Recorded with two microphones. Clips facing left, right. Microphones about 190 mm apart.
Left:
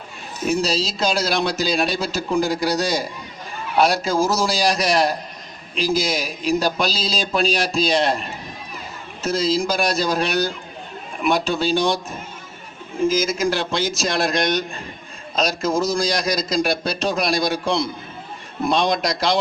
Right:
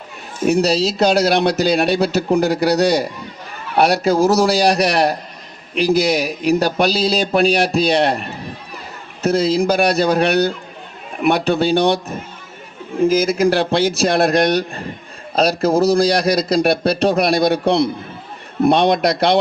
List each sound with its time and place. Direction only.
0.4 s speech: 65° right (ahead or behind)
9.2 s speech: 60° right (ahead or behind)